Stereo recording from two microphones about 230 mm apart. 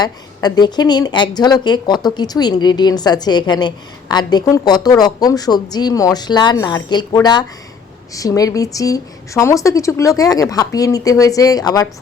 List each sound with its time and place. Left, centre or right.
0.0 s a woman's voice: centre